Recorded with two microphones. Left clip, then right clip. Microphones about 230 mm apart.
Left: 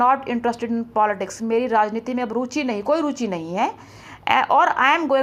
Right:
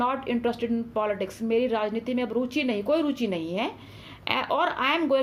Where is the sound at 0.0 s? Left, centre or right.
Centre.